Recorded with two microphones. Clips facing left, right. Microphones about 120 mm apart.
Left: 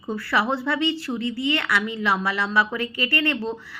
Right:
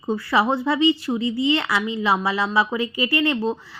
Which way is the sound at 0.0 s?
20° right (ahead or behind).